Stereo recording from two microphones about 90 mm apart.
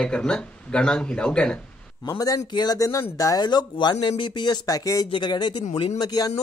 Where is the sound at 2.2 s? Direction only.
50° left (ahead or behind).